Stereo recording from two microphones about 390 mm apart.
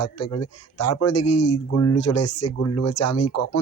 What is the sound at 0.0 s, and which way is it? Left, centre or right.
A man's voice, left.